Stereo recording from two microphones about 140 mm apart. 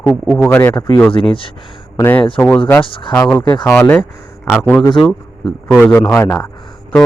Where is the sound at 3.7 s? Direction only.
15° left (ahead or behind).